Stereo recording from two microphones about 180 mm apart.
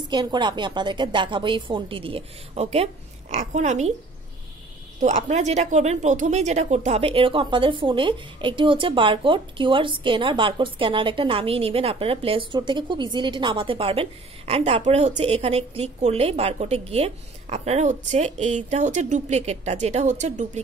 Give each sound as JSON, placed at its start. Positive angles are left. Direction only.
{"t": 0.1, "sound": "speech", "side_deg": -25}
{"t": 5.0, "sound": "a woman's voice", "side_deg": -40}